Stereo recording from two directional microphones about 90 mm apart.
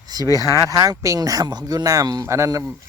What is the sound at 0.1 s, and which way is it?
Speech, 45° right (ahead or behind).